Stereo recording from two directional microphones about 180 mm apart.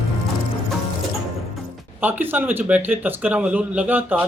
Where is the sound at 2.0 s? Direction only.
10° right (ahead or behind).